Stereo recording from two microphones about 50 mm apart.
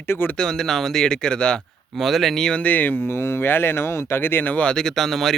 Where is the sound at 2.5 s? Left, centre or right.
Left.